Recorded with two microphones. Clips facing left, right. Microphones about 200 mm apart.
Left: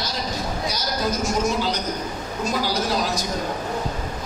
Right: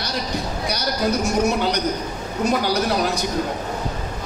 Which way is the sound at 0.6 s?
65° right (ahead or behind).